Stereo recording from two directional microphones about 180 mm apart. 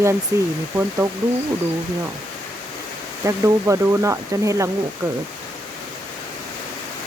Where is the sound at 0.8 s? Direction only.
15° right (ahead or behind).